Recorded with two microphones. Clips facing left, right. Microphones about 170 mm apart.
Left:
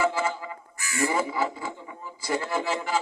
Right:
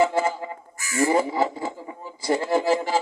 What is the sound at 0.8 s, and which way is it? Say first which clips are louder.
Crow: right 5 dB; 45° right (ahead or behind).